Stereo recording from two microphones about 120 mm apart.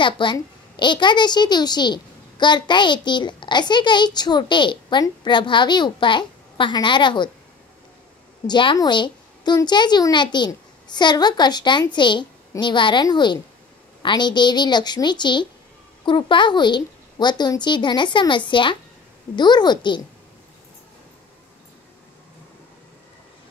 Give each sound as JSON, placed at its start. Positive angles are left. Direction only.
{"t": 0.0, "sound": "a woman's voice", "side_deg": 40}
{"t": 8.5, "sound": "a woman's voice", "side_deg": 40}